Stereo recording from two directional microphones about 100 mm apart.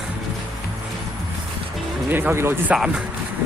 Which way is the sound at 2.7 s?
10° right (ahead or behind).